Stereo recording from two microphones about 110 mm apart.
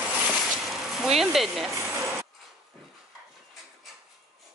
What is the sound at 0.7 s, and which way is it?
Speech, 5° right (ahead or behind).